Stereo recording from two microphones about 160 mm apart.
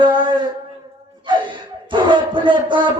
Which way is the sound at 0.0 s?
30° right (ahead or behind).